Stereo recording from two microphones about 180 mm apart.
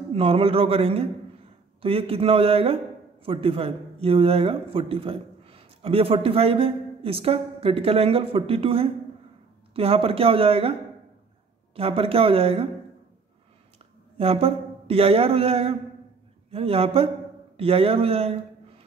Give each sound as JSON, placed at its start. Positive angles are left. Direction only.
{"t": 0.1, "sound": "speech", "side_deg": -30}
{"t": 14.1, "sound": "speech", "side_deg": -35}